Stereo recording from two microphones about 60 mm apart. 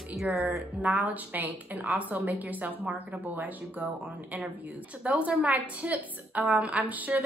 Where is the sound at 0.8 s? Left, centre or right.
Right.